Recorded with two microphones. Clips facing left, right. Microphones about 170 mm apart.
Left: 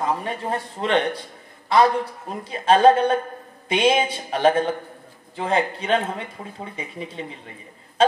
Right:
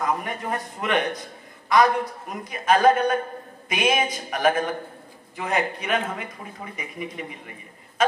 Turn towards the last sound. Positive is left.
turn(degrees=30)  # may be behind; listen again after turning